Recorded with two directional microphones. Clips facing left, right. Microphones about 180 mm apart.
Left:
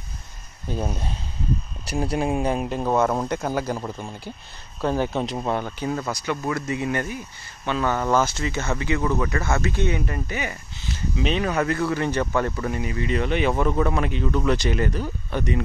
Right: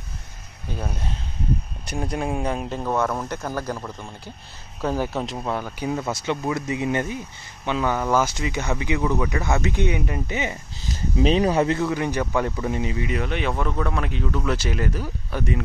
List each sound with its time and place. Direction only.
2.1 s speech: 5° left (ahead or behind)
2.8 s speech: 15° left (ahead or behind)
3.7 s speech: 20° left (ahead or behind)
4.8 s speech: 5° right (ahead or behind)
5.8 s speech: 15° right (ahead or behind)
10.8 s speech: 40° right (ahead or behind); by 15.6 s 5° right (ahead or behind)